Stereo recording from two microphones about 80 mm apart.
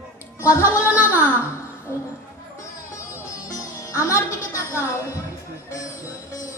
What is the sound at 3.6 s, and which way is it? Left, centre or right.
A woman's voice, left.